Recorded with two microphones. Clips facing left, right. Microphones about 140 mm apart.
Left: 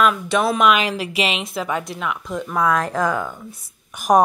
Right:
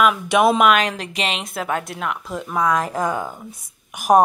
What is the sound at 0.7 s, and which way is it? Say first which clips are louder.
Speech: even; 5° left (ahead or behind).